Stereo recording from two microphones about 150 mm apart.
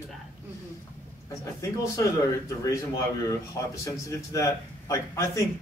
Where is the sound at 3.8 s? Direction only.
20° left (ahead or behind).